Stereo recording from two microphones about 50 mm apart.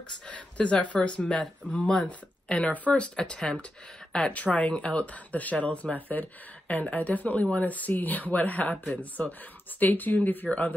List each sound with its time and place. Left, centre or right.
0.3 s speech: left